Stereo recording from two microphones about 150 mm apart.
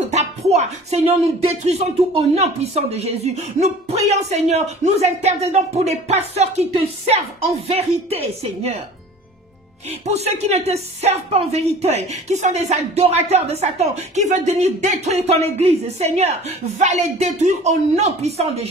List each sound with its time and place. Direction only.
0.1 s a woman's voice: 50° right (ahead or behind)
9.8 s a woman's voice: 45° right (ahead or behind)